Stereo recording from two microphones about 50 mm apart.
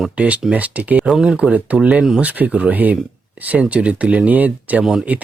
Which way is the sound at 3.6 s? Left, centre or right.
Right.